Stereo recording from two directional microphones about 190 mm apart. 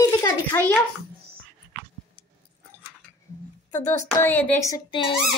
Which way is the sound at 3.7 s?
40° left (ahead or behind).